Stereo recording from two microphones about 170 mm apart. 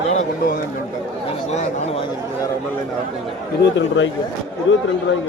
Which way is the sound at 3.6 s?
90° left.